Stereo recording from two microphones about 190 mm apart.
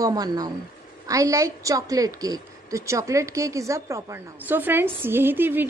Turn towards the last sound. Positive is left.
turn(degrees=-10)  # may be behind; listen again after turning